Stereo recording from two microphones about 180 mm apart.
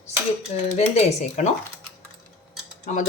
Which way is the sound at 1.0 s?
35° left (ahead or behind).